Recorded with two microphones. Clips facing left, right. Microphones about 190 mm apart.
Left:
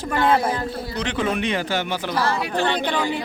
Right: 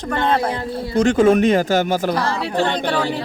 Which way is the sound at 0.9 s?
45° right (ahead or behind).